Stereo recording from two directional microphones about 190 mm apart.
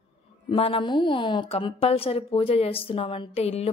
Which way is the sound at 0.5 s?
30° left (ahead or behind).